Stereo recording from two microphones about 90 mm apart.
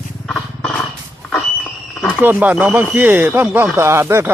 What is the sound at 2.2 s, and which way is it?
Speech, 20° right (ahead or behind).